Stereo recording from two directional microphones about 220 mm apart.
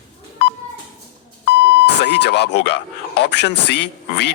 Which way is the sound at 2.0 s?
50° left (ahead or behind).